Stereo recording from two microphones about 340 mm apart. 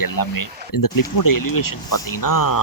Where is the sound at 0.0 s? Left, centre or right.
Left.